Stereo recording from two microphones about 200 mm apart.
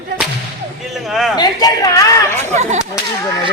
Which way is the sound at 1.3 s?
20° left (ahead or behind).